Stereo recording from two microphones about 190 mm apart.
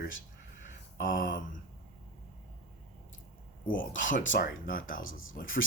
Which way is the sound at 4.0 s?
45° left (ahead or behind).